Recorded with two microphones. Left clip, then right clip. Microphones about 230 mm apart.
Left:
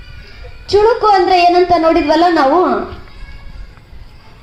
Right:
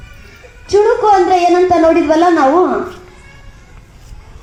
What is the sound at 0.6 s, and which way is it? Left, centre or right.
Speech, left.